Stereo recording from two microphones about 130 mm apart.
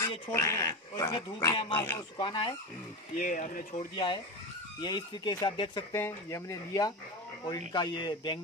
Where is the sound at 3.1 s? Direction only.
85° left.